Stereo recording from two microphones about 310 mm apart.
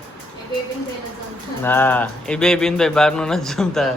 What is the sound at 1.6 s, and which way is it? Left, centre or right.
Speech, centre.